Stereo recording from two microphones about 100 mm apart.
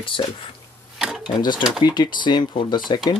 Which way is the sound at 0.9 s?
5° right (ahead or behind).